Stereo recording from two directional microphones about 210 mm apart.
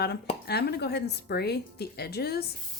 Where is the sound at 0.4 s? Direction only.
50° left (ahead or behind).